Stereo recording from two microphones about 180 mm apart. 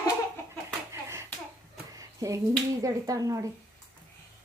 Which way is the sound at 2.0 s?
20° right (ahead or behind).